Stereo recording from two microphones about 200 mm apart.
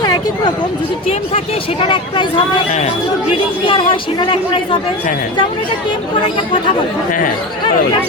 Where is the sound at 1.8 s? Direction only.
25° left (ahead or behind).